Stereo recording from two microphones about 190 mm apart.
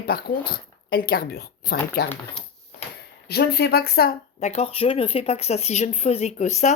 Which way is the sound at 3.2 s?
55° left (ahead or behind).